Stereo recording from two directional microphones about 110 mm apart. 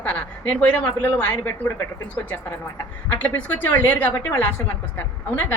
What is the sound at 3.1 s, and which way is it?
A woman's voice, 15° left (ahead or behind).